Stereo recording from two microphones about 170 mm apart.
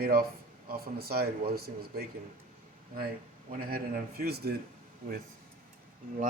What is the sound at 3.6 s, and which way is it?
Speech, 60° right (ahead or behind).